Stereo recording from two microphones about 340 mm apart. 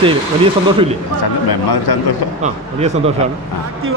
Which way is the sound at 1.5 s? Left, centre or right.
Left.